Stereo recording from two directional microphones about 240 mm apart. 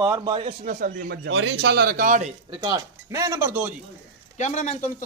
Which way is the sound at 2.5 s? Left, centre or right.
Centre.